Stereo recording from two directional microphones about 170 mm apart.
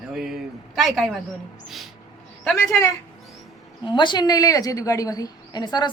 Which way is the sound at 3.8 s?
25° left (ahead or behind).